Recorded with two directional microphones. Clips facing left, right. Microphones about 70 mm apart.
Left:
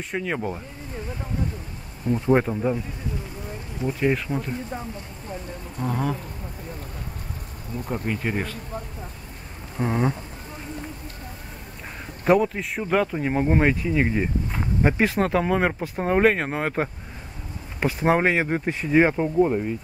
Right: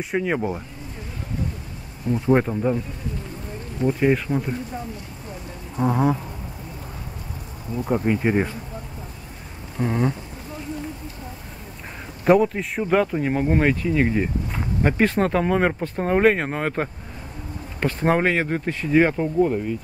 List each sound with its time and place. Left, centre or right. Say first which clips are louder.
0.0 s speech: right 4 dB; centre
2.0 s speech: right 1 dB; centre
3.8 s speech: right 4 dB; centre
5.8 s speech: right 6 dB; right
7.9 s speech: right 7 dB; centre
9.8 s speech: right 1 dB; centre
12.3 s speech: right 2 dB; centre